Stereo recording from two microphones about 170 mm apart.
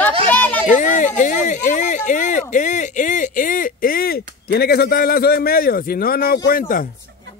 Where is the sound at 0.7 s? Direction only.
45° left (ahead or behind).